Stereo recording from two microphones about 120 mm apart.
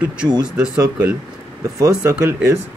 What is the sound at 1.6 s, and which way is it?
Speech, 25° right (ahead or behind).